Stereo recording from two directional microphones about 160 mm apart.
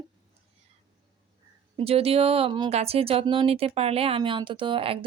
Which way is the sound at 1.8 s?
35° right (ahead or behind).